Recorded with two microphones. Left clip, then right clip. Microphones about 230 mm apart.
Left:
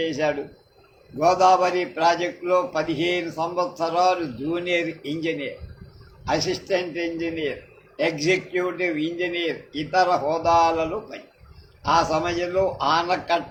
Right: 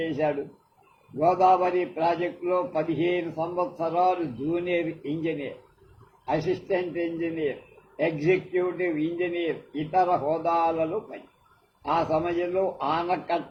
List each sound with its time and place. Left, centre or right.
0.0 s a man's voice: left